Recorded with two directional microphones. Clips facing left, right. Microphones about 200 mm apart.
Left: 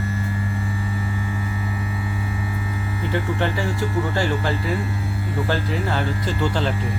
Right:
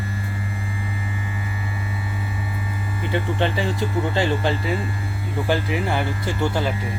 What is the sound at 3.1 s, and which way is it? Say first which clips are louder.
Speech: right 1 dB; 20° right (ahead or behind).